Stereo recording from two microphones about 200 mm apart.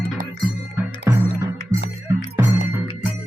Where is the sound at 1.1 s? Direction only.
15° right (ahead or behind).